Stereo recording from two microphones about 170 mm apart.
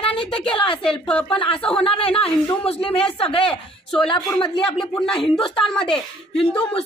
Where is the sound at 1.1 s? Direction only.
5° left (ahead or behind).